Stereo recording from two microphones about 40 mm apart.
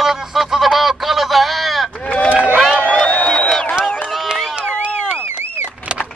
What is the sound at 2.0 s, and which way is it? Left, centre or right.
Run, left.